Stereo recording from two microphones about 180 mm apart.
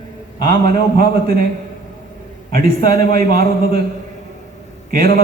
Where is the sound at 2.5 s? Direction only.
55° right (ahead or behind).